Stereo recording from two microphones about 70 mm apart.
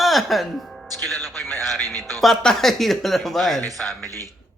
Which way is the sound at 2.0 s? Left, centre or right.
Right.